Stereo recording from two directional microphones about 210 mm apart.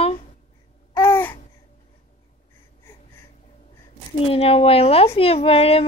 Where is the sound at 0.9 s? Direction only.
10° left (ahead or behind).